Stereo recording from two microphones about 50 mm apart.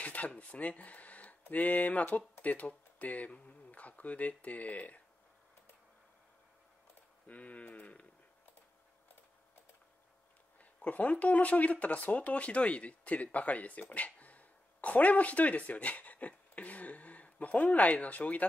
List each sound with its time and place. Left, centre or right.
0.0 s a sound: left
0.3 s speech: left
7.2 s speech: left
10.6 s speech: left